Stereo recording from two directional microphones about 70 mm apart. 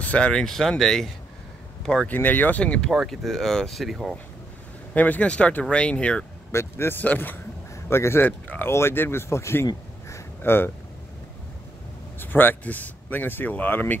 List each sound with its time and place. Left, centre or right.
0.0 s speech: centre
2.0 s speech: left
2.6 s speech: centre
2.9 s speech: centre
4.9 s speech: left
6.5 s speech: left
7.0 s speech: left
7.7 s speech: left
10.0 s a sound: left
12.2 s speech: left